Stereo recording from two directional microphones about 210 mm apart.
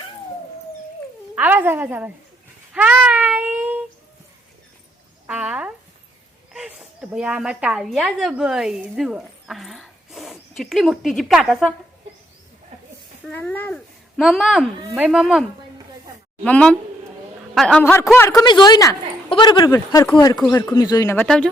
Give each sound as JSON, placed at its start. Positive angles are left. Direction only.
{"t": 1.4, "sound": "a woman's voice", "side_deg": -10}
{"t": 2.7, "sound": "cat", "side_deg": -5}
{"t": 5.2, "sound": "a sound", "side_deg": -5}
{"t": 6.5, "sound": "a woman's voice", "side_deg": -5}
{"t": 13.2, "sound": "speech", "side_deg": 5}
{"t": 21.2, "sound": "speech", "side_deg": 5}